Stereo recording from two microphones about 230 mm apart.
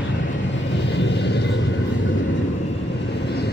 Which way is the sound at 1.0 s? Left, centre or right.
Left.